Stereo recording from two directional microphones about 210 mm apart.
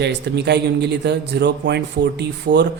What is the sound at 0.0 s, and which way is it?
A man's voice, 55° right (ahead or behind).